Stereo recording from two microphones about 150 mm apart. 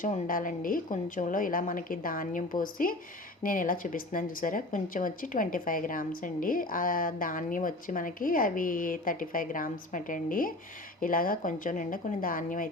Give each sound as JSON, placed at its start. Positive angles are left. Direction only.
{"t": 0.0, "sound": "speech", "side_deg": 65}